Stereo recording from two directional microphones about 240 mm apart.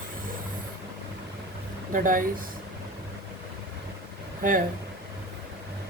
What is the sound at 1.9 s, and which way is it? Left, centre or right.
Speech, right.